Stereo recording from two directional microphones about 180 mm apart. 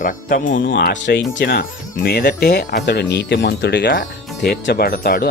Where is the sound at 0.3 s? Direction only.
45° left (ahead or behind).